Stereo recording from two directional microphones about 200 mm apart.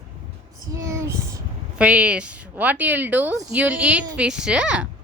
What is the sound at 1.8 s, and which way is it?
Speech, 5° right (ahead or behind).